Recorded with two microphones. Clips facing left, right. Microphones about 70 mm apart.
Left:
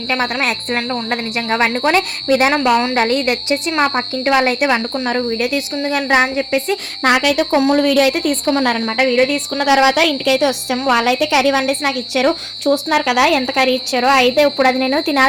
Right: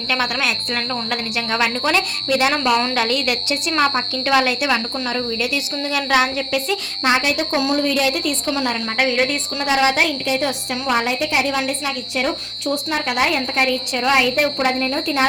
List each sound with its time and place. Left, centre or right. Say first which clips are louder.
0.1 s a woman's voice: left 3 dB; left
2.6 s a woman's voice: left 4 dB; centre
2.9 s a woman's voice: left 5 dB; left
4.6 s a woman's voice: left 4 dB; left
7.0 s a woman's voice: left 5 dB; left
12.9 s a woman's voice: left 5 dB; left